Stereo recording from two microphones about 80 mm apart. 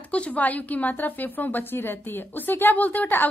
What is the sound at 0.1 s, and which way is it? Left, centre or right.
A woman's voice, centre.